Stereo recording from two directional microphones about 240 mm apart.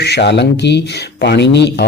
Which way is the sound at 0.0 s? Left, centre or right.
Left.